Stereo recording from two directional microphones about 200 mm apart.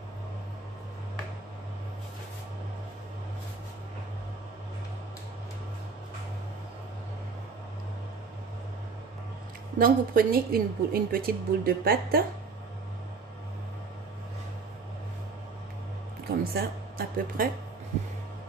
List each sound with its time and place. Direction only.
9.8 s a woman's voice: 45° right (ahead or behind)
16.3 s speech: 50° right (ahead or behind)